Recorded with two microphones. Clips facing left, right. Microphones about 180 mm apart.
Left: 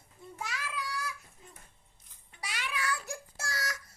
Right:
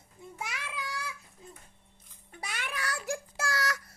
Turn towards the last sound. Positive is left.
turn(degrees=-65)  # may be behind; listen again after turning